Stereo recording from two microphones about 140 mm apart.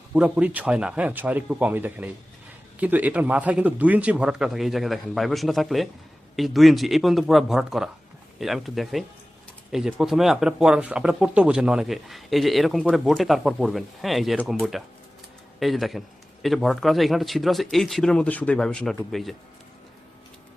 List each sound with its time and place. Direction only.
0.1 s speech: 10° right (ahead or behind)